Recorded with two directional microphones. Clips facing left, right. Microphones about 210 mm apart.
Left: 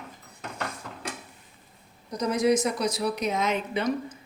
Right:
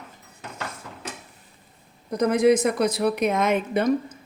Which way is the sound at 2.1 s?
55° right (ahead or behind).